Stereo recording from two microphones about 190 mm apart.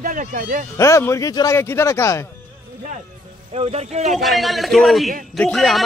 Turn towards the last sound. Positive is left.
turn(degrees=0)  # may be behind; listen again after turning